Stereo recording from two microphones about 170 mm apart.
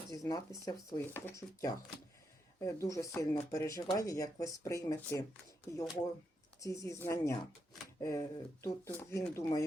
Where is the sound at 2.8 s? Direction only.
20° left (ahead or behind).